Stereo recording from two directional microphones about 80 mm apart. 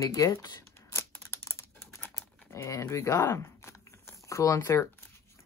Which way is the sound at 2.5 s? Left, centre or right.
Left.